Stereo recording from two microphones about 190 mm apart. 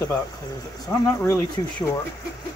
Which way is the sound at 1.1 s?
15° left (ahead or behind).